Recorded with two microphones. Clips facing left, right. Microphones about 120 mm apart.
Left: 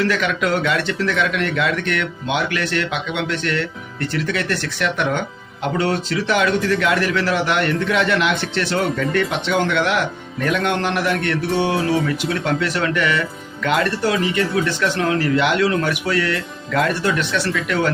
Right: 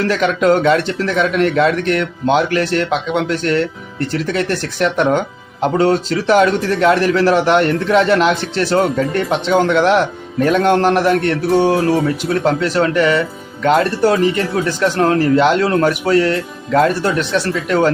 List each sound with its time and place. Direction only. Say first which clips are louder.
0.0 s a man's voice: right 5 dB; 35° right (ahead or behind)